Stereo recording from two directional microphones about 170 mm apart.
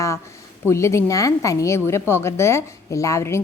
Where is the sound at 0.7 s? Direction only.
15° left (ahead or behind).